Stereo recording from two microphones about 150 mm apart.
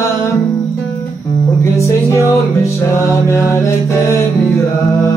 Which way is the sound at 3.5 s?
20° left (ahead or behind).